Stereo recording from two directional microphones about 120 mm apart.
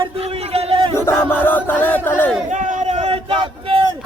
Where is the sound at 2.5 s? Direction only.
75° right (ahead or behind).